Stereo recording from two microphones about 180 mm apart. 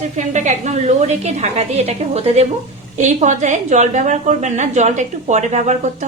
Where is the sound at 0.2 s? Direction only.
40° right (ahead or behind).